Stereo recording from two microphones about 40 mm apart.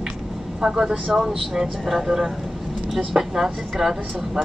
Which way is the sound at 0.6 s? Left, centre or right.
Centre.